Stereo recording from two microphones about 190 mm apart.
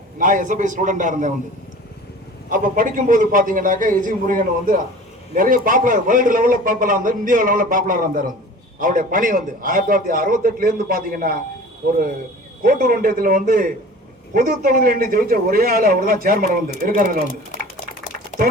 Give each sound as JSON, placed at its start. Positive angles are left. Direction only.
{"t": 0.2, "sound": "a man's voice", "side_deg": -45}
{"t": 2.5, "sound": "a man's voice", "side_deg": -45}
{"t": 12.6, "sound": "a man's voice", "side_deg": -45}